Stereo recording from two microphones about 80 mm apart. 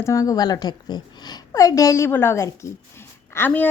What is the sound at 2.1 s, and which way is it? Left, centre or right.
Speech, left.